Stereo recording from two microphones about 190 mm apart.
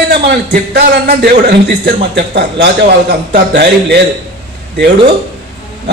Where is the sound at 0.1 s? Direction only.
55° right (ahead or behind).